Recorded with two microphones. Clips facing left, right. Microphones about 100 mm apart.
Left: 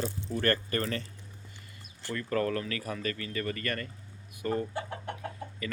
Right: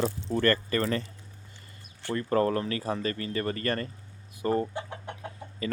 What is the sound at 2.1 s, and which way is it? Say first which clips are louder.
Speech: right 5 dB; 30° right (ahead or behind).